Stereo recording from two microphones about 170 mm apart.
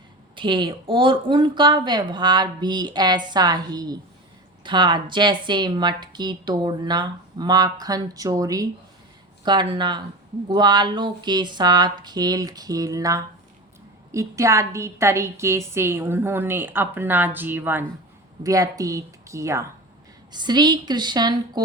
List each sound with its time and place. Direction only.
0.3 s a woman's voice: 30° right (ahead or behind)